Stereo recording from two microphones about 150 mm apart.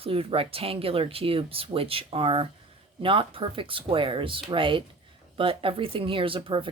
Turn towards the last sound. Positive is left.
turn(degrees=-35)  # may be behind; listen again after turning